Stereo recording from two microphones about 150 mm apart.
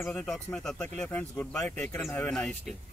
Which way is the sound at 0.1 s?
5° left (ahead or behind).